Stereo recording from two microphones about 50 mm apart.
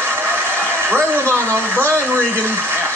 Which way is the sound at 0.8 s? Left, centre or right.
Right.